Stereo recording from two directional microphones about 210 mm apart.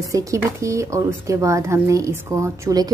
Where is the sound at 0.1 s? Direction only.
15° right (ahead or behind).